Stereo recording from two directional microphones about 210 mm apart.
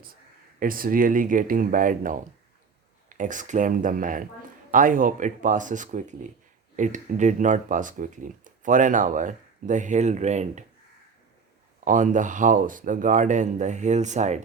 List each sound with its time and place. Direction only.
0.6 s speech: 40° right (ahead or behind)
11.9 s speech: 35° right (ahead or behind)